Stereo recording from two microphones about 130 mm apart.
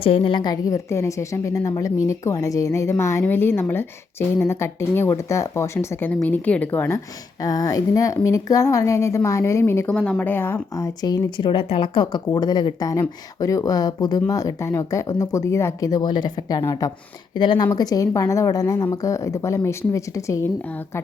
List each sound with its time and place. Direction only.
0.0 s a woman's voice: 45° left (ahead or behind); by 9.9 s 20° left (ahead or behind)
9.9 s a woman's voice: 10° left (ahead or behind)
10.7 s a woman's voice: 25° left (ahead or behind)
20.7 s a woman's voice: 15° left (ahead or behind)